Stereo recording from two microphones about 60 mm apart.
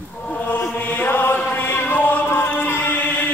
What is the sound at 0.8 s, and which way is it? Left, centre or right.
Mantra, left.